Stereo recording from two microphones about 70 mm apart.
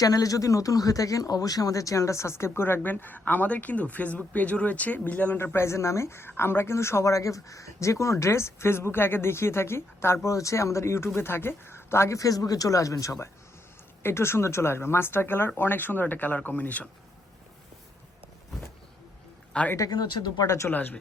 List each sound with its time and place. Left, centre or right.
0.0 s speech: left
5.5 s speech: left
10.2 s speech: left
14.0 s speech: left
19.5 s speech: centre
19.9 s speech: left
20.7 s speech: left